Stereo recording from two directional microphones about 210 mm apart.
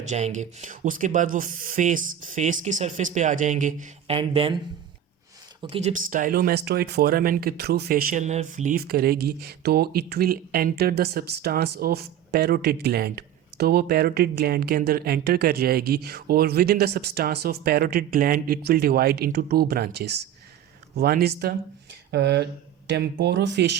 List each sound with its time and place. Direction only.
0.1 s speech: 35° right (ahead or behind)
5.6 s speech: 30° right (ahead or behind); by 23.7 s 55° right (ahead or behind)